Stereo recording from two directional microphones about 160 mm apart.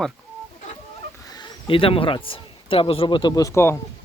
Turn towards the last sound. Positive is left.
turn(degrees=15)  # may be behind; listen again after turning